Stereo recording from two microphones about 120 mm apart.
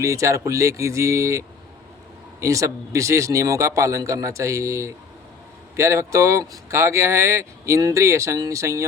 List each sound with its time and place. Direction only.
0.0 s speech: 25° right (ahead or behind)